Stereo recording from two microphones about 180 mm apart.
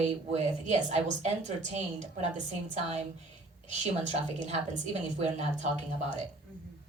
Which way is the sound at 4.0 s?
40° right (ahead or behind).